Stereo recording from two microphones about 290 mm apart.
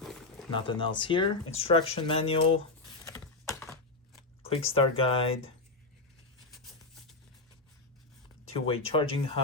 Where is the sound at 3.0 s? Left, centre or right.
Centre.